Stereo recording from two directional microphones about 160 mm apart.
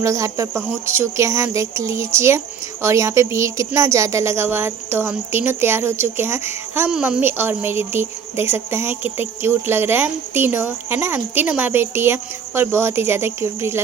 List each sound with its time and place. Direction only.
0.0 s speech: 20° right (ahead or behind)